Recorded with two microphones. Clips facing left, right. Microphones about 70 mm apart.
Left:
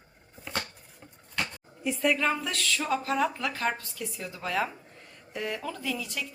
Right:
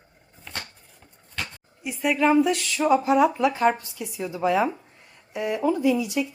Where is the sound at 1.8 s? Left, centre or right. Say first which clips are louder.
Right 4 dB; centre.